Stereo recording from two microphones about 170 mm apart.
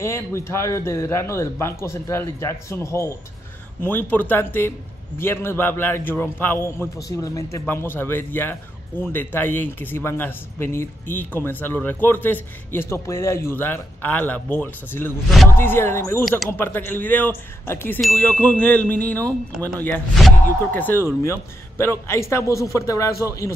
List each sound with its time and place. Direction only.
0.0 s a man's voice: 15° left (ahead or behind)